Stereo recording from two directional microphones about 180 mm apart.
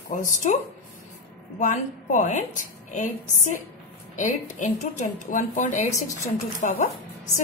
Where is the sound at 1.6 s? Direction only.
45° left (ahead or behind).